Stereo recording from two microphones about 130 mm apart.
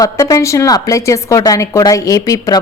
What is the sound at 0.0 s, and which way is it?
A woman's voice, 25° left (ahead or behind).